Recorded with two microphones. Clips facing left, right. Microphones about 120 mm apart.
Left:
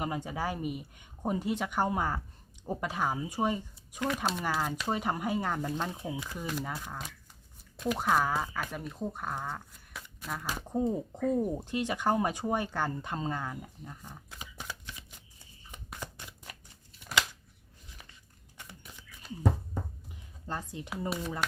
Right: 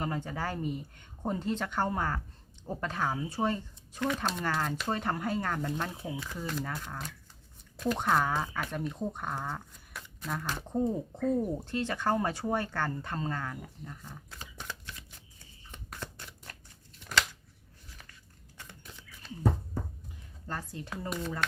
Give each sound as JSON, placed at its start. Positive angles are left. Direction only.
{"t": 0.0, "sound": "speech", "side_deg": 15}
{"t": 15.7, "sound": "shuffling cards", "side_deg": 15}
{"t": 17.0, "sound": "scissors", "side_deg": 5}
{"t": 19.2, "sound": "speech", "side_deg": 10}
{"t": 20.5, "sound": "speech", "side_deg": 20}